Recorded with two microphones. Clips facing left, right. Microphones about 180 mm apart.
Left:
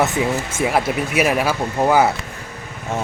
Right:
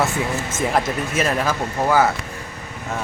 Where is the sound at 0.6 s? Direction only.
10° left (ahead or behind).